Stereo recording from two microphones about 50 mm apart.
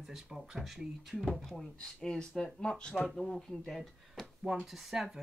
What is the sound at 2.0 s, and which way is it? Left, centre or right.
Speech, centre.